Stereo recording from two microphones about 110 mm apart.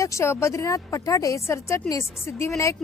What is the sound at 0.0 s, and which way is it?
A woman's voice, 25° left (ahead or behind).